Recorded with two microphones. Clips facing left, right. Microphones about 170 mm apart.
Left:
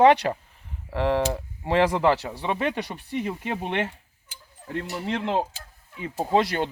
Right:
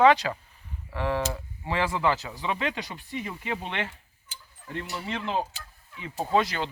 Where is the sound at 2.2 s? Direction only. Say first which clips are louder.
Left 4 dB; 55° left (ahead or behind).